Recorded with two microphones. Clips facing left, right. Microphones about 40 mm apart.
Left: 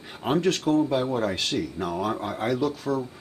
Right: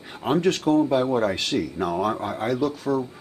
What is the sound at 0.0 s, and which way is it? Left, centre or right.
Speech, centre.